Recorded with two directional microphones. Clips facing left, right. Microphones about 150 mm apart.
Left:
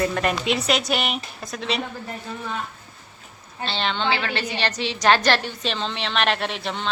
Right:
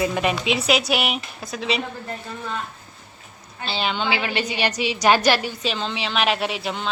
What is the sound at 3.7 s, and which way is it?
A woman's voice, 5° right (ahead or behind).